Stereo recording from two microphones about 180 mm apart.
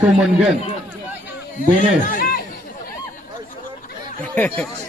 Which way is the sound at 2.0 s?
50° left (ahead or behind).